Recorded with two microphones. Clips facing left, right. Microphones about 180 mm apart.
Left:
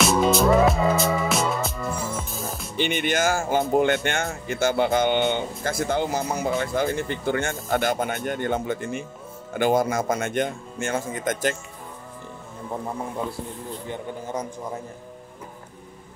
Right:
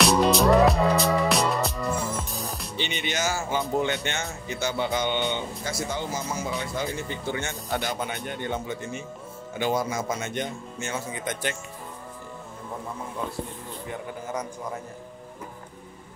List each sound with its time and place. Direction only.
0.0 s music: centre (ahead or behind)
2.8 s speech: 50° left (ahead or behind)